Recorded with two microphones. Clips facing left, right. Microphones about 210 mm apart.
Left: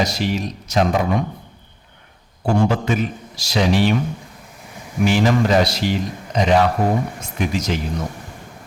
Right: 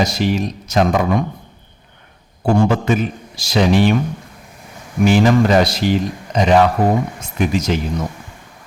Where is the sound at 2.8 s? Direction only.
50° right (ahead or behind).